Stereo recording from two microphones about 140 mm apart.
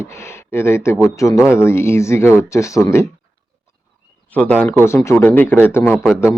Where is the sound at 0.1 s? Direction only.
20° left (ahead or behind).